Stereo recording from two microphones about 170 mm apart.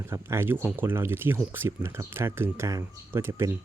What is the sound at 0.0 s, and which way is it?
Speech, 15° right (ahead or behind).